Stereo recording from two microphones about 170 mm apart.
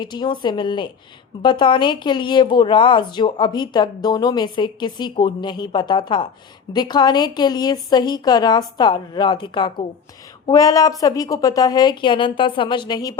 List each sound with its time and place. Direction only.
0.0 s a woman's voice: 25° left (ahead or behind)